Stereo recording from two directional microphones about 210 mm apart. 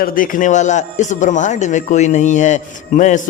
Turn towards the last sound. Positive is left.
turn(degrees=35)  # may be behind; listen again after turning